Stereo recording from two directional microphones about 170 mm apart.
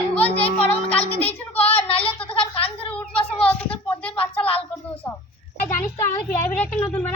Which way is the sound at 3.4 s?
10° left (ahead or behind).